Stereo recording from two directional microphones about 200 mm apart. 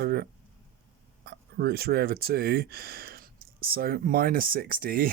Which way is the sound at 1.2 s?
50° right (ahead or behind).